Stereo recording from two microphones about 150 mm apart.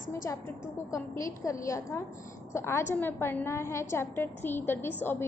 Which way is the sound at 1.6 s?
20° left (ahead or behind).